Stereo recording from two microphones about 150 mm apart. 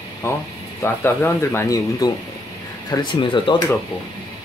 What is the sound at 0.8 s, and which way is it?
Speech, 15° left (ahead or behind).